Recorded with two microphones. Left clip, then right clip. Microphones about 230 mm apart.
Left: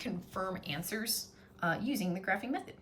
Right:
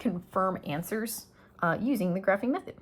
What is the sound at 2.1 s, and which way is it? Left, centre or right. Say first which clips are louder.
Speech: right 8 dB; centre.